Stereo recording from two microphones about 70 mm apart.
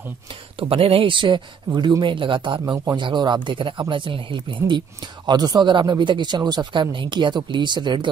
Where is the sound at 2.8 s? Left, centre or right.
Right.